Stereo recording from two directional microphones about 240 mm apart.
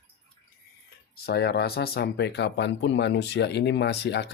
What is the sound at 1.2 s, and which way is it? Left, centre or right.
Speech, left.